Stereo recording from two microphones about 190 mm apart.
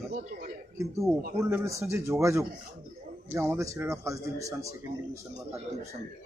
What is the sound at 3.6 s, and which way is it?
Speech, 15° right (ahead or behind).